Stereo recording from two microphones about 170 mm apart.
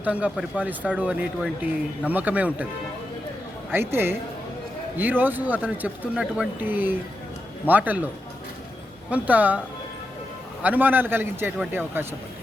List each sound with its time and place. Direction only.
0.0 s speech: 10° right (ahead or behind)
3.7 s speech: 15° right (ahead or behind)
10.6 s speech: 10° right (ahead or behind)